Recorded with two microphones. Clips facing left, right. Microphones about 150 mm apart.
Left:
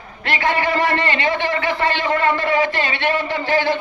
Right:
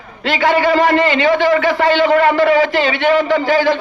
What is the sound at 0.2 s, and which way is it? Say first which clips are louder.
A man's voice: right 6 dB; 90° right.